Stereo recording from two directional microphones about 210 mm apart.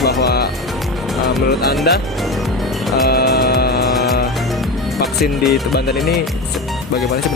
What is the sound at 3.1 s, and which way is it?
Music, 50° left (ahead or behind).